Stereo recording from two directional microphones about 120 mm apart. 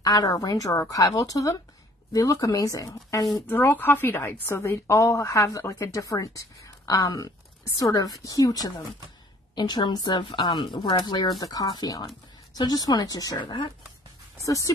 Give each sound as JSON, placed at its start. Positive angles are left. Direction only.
{"t": 0.0, "sound": "a woman's voice", "side_deg": 30}
{"t": 14.4, "sound": "a woman's voice", "side_deg": 25}